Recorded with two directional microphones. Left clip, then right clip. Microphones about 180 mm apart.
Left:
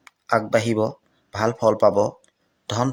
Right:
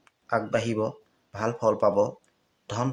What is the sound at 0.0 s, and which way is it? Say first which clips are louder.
Speech: left 6 dB; 35° left (ahead or behind).